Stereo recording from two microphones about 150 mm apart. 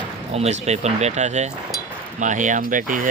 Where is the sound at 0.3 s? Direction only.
45° right (ahead or behind).